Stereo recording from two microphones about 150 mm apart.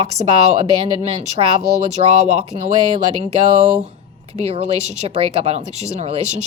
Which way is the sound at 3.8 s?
45° right (ahead or behind).